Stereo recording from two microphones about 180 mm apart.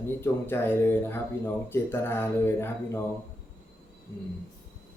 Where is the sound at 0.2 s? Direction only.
15° left (ahead or behind).